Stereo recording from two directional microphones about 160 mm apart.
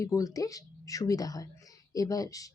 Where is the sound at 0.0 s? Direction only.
20° left (ahead or behind).